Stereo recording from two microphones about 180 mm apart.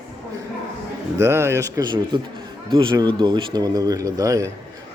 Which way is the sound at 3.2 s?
25° right (ahead or behind).